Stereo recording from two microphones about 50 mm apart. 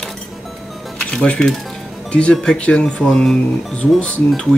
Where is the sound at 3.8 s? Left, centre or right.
Left.